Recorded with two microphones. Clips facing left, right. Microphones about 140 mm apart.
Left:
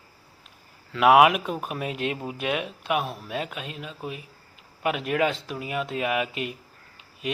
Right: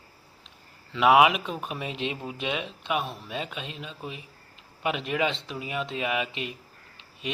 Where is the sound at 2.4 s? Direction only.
5° left (ahead or behind).